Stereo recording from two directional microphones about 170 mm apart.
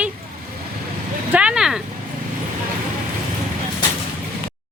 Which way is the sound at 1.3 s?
5° right (ahead or behind).